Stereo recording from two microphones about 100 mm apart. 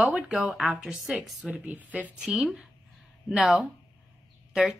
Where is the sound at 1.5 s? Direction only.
15° right (ahead or behind).